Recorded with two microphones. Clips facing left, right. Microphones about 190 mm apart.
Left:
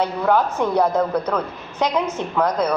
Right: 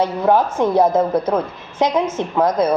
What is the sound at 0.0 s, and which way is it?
A woman's voice, 25° right (ahead or behind).